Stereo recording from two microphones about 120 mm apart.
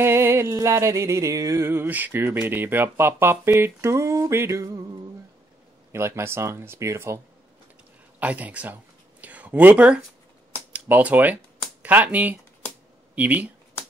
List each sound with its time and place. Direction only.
0.0 s speech: 20° right (ahead or behind)
5.9 s speech: 20° right (ahead or behind)
8.2 s speech: 10° right (ahead or behind)
9.2 s a sound: 15° right (ahead or behind)
10.7 s speech: 10° right (ahead or behind)